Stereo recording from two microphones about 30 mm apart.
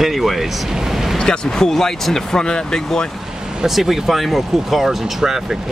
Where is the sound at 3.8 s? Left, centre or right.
Centre.